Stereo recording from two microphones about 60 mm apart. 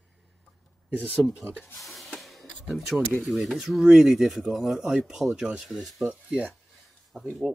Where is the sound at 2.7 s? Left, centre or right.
Centre.